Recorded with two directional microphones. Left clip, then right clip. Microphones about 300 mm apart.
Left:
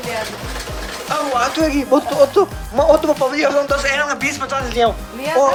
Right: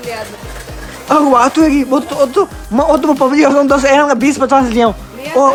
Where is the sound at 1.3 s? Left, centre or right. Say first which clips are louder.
Right 7 dB; right.